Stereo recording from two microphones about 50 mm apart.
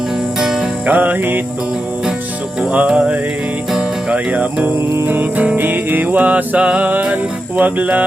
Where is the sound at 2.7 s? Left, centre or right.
Right.